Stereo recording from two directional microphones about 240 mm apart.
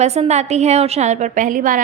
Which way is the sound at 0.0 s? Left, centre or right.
Right.